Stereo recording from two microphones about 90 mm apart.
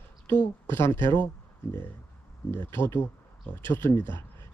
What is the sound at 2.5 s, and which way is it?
Speech, 25° left (ahead or behind).